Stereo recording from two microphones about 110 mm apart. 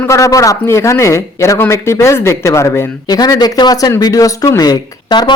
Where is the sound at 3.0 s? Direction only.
35° left (ahead or behind).